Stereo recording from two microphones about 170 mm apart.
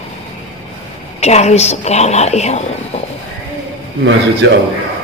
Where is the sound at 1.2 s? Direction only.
40° left (ahead or behind).